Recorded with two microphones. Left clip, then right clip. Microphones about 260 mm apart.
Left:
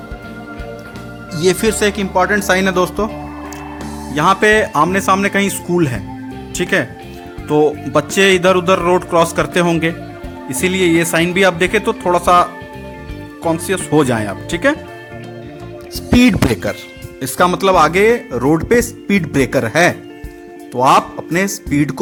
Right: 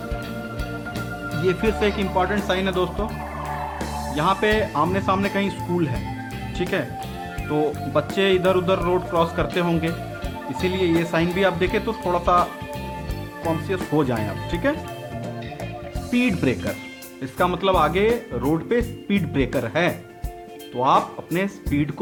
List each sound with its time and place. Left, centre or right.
1.5 s speech: left
4.1 s speech: left
16.1 s speech: left